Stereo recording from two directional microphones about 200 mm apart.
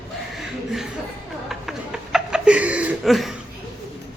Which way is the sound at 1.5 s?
Centre (ahead or behind).